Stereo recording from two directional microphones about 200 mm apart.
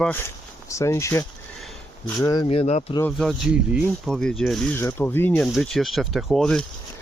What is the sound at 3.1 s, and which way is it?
Speech, centre (ahead or behind).